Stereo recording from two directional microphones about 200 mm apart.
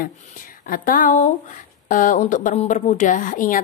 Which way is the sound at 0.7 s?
45° left (ahead or behind).